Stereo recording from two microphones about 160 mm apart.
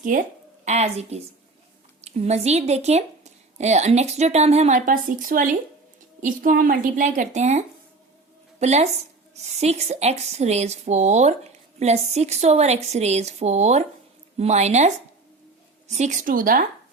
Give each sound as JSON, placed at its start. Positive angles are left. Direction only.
{"t": 0.0, "sound": "a woman's voice", "side_deg": -55}